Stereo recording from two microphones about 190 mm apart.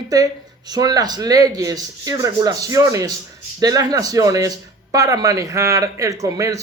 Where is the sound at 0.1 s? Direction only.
20° right (ahead or behind).